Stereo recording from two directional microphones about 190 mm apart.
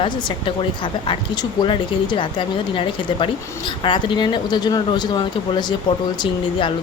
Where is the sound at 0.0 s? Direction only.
25° left (ahead or behind).